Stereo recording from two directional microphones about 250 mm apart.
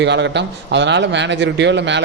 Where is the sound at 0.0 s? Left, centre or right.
Right.